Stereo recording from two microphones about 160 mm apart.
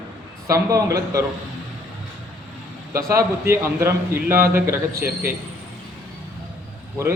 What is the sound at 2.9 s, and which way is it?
A man's voice, 20° right (ahead or behind).